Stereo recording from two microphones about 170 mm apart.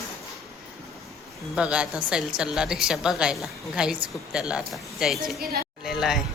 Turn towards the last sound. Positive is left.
turn(degrees=0)  # may be behind; listen again after turning